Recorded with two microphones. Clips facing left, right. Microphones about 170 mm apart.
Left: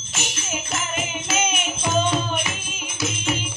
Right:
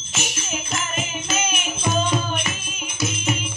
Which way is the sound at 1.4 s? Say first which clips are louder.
Even; 20° left (ahead or behind).